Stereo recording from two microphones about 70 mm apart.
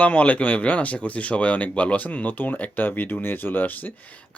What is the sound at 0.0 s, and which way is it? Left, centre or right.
Speech, left.